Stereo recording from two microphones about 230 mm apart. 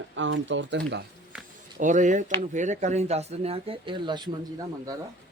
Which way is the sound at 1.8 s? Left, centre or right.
Right.